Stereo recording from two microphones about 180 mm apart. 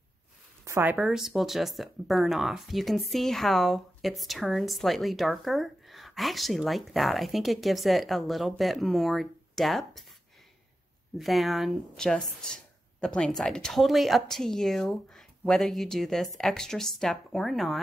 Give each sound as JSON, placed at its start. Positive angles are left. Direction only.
{"t": 0.7, "sound": "speech", "side_deg": -15}
{"t": 0.9, "sound": "speech", "side_deg": -5}
{"t": 11.1, "sound": "speech", "side_deg": 0}